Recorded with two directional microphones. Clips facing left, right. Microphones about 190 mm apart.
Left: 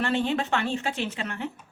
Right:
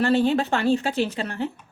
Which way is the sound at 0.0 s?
35° right (ahead or behind).